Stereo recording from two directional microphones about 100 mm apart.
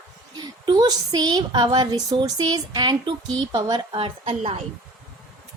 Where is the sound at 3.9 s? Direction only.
70° right (ahead or behind).